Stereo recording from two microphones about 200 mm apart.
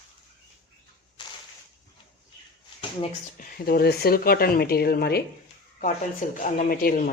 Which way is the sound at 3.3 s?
45° left (ahead or behind).